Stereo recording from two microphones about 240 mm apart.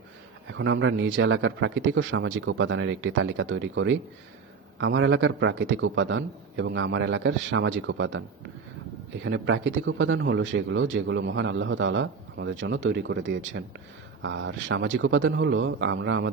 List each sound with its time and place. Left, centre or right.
0.5 s a man's voice: right
9.2 s a man's voice: right